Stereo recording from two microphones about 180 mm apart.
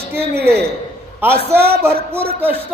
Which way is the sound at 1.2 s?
15° right (ahead or behind).